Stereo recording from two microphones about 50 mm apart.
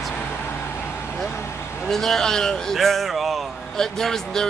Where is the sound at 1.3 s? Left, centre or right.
Left.